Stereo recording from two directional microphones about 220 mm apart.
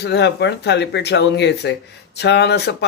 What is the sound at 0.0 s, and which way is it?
Speech, 50° left (ahead or behind).